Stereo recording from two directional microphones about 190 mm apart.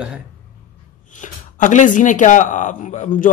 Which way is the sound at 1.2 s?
40° left (ahead or behind).